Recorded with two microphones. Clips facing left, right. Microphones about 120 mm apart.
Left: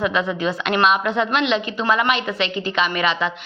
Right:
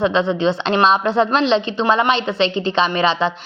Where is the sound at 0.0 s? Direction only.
25° right (ahead or behind).